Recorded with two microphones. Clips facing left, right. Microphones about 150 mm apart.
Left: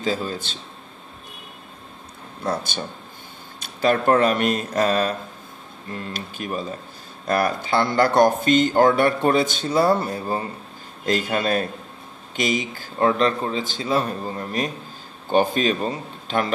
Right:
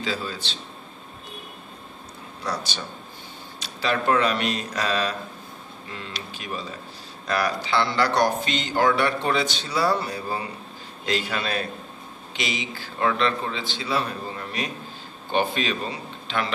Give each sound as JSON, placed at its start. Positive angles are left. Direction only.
{"t": 0.0, "sound": "speech", "side_deg": 45}
{"t": 2.4, "sound": "speech", "side_deg": 50}